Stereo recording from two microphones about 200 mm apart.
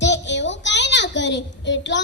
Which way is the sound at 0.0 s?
60° left (ahead or behind).